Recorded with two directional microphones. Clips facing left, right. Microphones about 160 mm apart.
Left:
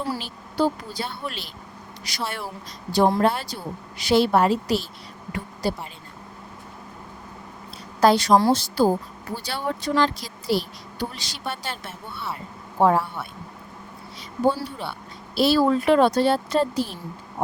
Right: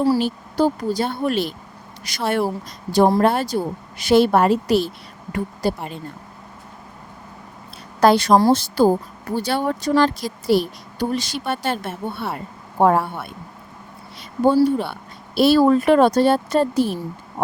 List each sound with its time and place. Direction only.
0.2 s a woman's voice: 45° right (ahead or behind)
8.0 s a woman's voice: 55° right (ahead or behind)
14.4 s a woman's voice: 50° right (ahead or behind)